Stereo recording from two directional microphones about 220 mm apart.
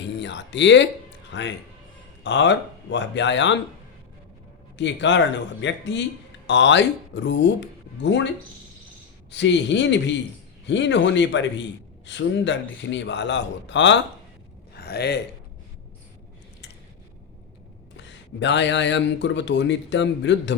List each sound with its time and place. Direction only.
0.0 s a man's voice: 55° left (ahead or behind)
4.8 s a man's voice: 55° left (ahead or behind)
9.3 s a man's voice: 55° left (ahead or behind)
17.9 s speech: 55° left (ahead or behind)